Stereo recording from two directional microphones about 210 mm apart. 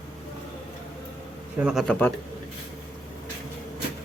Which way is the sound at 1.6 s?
Centre (ahead or behind).